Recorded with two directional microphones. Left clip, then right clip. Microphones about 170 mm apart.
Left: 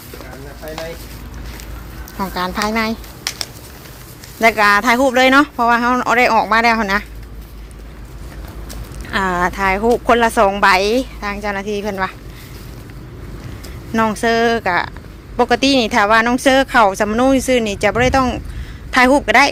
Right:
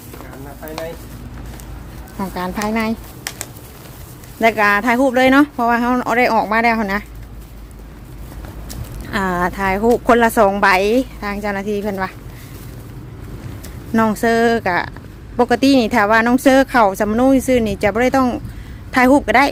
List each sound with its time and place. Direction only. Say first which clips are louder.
2.1 s speech: left 3 dB; 15° right (ahead or behind)
4.4 s speech: left 2 dB; 20° right (ahead or behind)
9.0 s speech: left 2 dB; 25° right (ahead or behind)
13.9 s speech: even; 30° right (ahead or behind)